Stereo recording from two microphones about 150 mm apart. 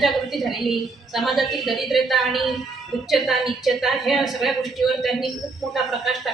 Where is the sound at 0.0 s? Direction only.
Centre (ahead or behind).